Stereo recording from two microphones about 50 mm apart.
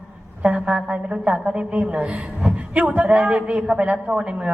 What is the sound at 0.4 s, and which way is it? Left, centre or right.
A woman's voice, centre.